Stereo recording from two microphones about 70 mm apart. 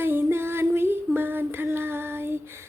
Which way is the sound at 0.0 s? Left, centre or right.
Right.